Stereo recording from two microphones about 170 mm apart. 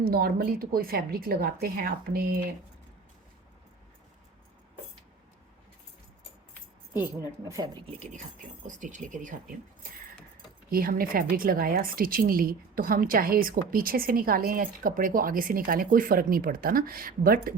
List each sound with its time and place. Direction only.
0.0 s a woman's voice: 60° right (ahead or behind)
6.9 s a woman's voice: 15° right (ahead or behind)
7.9 s speech: 40° right (ahead or behind)
10.7 s a woman's voice: 60° right (ahead or behind)